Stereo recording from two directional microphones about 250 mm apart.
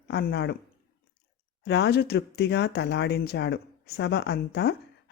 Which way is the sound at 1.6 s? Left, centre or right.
Left.